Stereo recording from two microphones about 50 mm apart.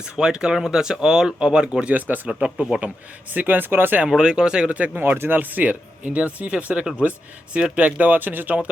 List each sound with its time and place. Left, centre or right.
0.0 s speech: centre
2.0 s speech: right
2.7 s speech: right
3.3 s speech: right
4.2 s speech: centre
4.9 s speech: right
5.3 s speech: right